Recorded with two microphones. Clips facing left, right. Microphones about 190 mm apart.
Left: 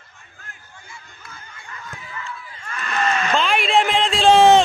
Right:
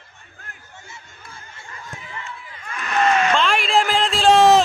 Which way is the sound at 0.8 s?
25° right (ahead or behind).